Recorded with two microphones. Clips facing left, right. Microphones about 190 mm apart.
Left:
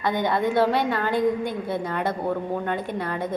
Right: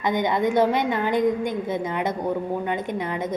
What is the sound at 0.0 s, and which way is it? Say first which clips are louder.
A woman's voice: right 1 dB; 20° right (ahead or behind).